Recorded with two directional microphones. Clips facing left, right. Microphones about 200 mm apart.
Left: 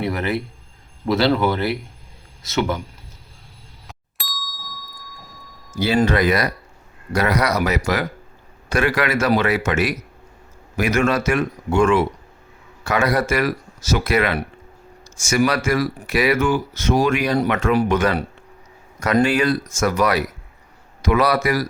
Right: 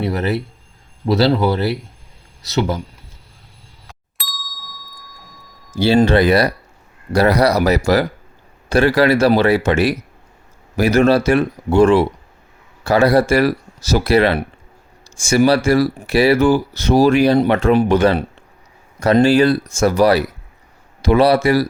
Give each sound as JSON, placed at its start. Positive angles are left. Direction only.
{"t": 0.0, "sound": "speech", "side_deg": -35}
{"t": 4.2, "sound": "ding", "side_deg": 0}
{"t": 5.7, "sound": "speech", "side_deg": -30}